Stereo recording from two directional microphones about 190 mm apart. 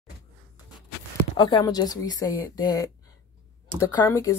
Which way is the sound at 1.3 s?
20° left (ahead or behind).